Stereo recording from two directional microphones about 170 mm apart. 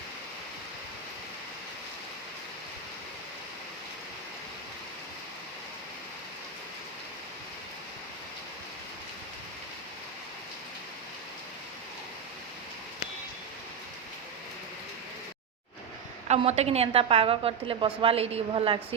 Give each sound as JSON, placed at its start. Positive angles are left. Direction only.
{"t": 16.3, "sound": "a woman's voice", "side_deg": -40}